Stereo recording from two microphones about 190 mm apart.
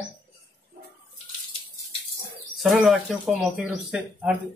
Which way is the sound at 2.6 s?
Centre (ahead or behind).